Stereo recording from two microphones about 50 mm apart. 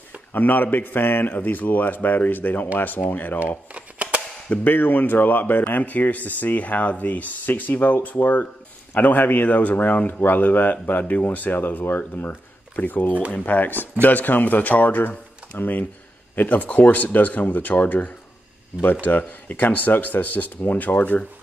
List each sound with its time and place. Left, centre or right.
0.3 s speech: left
3.4 s shuffling cards: right
4.6 s speech: left